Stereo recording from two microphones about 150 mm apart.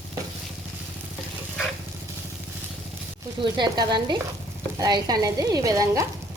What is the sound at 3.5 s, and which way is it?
Sizzle, 30° right (ahead or behind).